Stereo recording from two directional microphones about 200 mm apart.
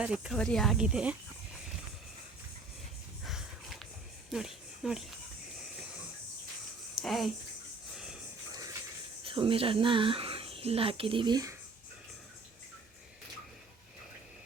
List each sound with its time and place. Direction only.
0.0 s speech: 5° right (ahead or behind)
3.2 s a sound: centre (ahead or behind)
4.3 s speech: centre (ahead or behind)
6.9 s speech: centre (ahead or behind)
9.2 s speech: 25° right (ahead or behind)